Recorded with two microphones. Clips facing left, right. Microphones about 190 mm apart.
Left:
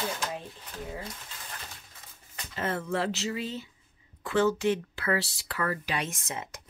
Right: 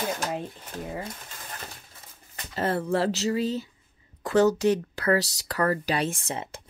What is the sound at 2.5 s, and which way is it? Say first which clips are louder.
Speech: right 5 dB; 35° right (ahead or behind).